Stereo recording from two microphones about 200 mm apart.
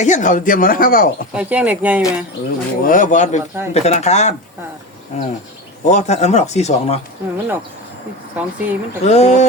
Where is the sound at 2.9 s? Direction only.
40° left (ahead or behind).